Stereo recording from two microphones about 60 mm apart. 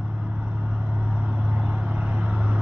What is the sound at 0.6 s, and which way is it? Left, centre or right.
Vehicle, right.